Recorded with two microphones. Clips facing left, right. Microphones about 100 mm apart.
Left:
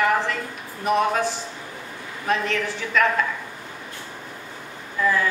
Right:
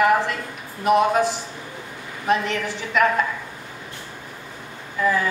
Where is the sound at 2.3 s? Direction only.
15° right (ahead or behind).